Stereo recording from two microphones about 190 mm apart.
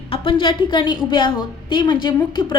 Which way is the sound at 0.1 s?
25° left (ahead or behind).